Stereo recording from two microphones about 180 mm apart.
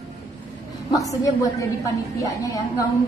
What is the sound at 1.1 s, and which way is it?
A woman's voice, 20° left (ahead or behind).